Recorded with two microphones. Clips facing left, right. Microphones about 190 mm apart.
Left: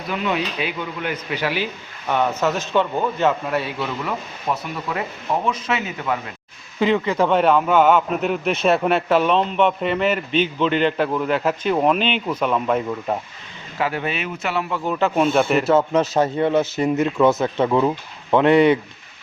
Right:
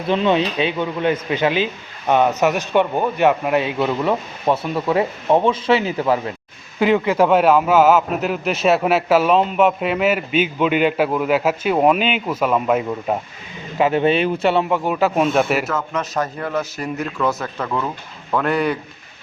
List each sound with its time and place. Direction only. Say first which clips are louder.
0.1 s a man's voice: right 6 dB; 25° right (ahead or behind)
6.7 s a man's voice: right 3 dB; 10° right (ahead or behind)
13.7 s speech: right 8 dB; 20° right (ahead or behind)
14.8 s a man's voice: right 1 dB; 5° right (ahead or behind)
15.6 s speech: left 7 dB; 30° left (ahead or behind)